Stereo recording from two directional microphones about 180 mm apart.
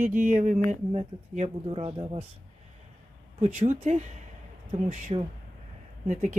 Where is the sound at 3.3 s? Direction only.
40° right (ahead or behind).